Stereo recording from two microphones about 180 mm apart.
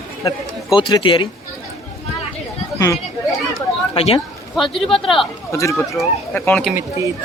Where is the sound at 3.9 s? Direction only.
35° left (ahead or behind).